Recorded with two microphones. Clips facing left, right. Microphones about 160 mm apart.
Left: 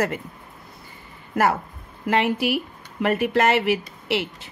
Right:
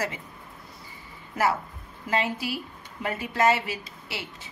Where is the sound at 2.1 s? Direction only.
70° left (ahead or behind).